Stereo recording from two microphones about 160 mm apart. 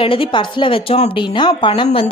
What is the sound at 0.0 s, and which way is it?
A woman's voice, 35° left (ahead or behind).